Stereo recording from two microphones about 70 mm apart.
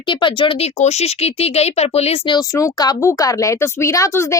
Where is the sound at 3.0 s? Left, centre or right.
Left.